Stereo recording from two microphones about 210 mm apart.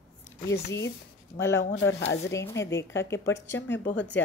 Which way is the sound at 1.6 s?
60° left (ahead or behind).